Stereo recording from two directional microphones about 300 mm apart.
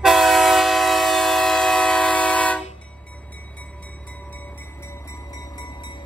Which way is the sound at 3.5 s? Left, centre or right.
Centre.